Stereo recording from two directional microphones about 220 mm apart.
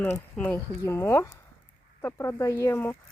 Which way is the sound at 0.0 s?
5° left (ahead or behind).